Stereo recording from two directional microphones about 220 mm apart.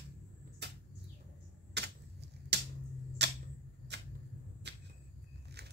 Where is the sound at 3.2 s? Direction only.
50° right (ahead or behind).